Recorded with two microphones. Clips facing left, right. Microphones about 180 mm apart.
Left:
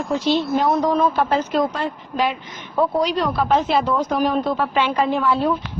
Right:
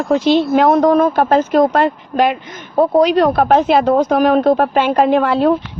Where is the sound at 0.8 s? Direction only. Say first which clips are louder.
Right 6 dB; 50° right (ahead or behind).